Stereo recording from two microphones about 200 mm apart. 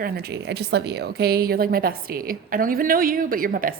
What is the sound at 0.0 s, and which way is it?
A woman's voice, 55° right (ahead or behind).